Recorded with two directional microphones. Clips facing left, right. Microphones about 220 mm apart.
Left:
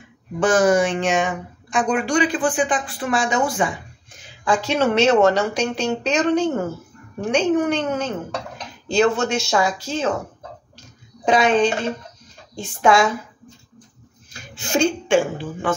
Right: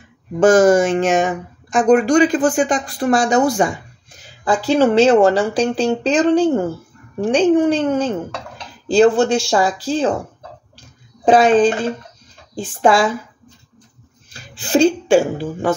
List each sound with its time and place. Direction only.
0.4 s a woman's voice: 45° right (ahead or behind)
11.2 s a woman's voice: 35° right (ahead or behind)
14.3 s speech: 35° right (ahead or behind)